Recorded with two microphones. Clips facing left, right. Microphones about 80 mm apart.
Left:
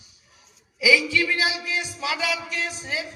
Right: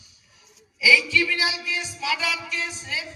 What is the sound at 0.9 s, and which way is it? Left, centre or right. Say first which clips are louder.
A man's voice: even; left.